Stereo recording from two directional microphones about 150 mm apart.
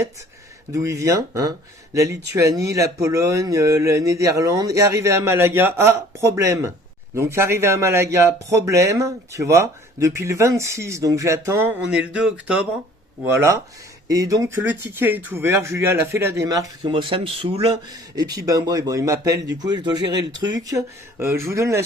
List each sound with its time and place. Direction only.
0.7 s speech: 20° right (ahead or behind); by 17.7 s 40° right (ahead or behind)
18.2 s speech: 25° right (ahead or behind)